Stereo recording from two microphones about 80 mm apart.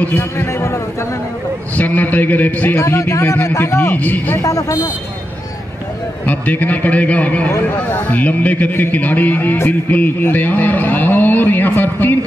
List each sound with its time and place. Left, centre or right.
0.0 s a man's voice: left
1.8 s a man's voice: left
2.8 s a man's voice: left
3.9 s a man's voice: left
4.4 s a man's voice: left
6.2 s a man's voice: left